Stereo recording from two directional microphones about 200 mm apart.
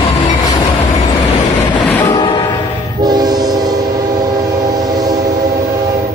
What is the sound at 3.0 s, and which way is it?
Train, 20° right (ahead or behind).